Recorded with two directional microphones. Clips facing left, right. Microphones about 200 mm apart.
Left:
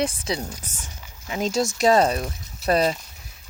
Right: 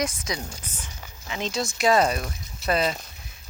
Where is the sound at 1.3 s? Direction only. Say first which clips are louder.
Left 5 dB; 45° left (ahead or behind).